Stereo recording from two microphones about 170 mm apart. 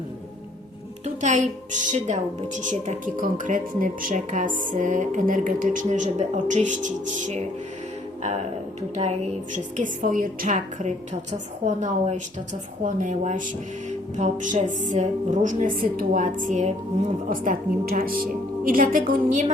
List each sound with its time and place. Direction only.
1.0 s a woman's voice: 45° right (ahead or behind)
9.7 s a woman's voice: 50° right (ahead or behind)